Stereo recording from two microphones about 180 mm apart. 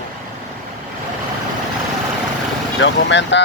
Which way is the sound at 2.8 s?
85° left.